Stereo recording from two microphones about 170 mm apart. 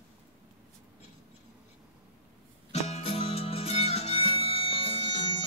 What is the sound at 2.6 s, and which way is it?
Music, 40° left (ahead or behind).